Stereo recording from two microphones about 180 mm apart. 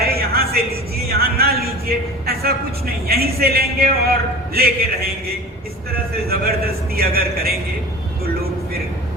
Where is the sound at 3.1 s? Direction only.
60° right (ahead or behind).